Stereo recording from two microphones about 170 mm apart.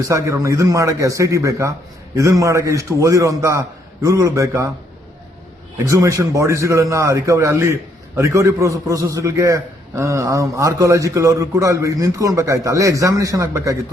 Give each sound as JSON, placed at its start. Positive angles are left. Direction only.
{"t": 0.0, "sound": "a man's voice", "side_deg": -20}
{"t": 5.7, "sound": "a man's voice", "side_deg": -20}